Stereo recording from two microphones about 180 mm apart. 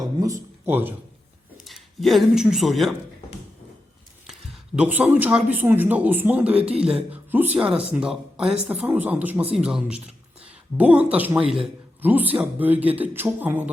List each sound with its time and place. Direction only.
0.0 s a sound: 20° right (ahead or behind)
1.6 s speech: centre (ahead or behind)
4.3 s speech: 5° right (ahead or behind)